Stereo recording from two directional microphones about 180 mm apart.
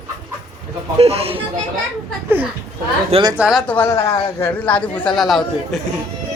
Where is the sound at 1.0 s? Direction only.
35° right (ahead or behind).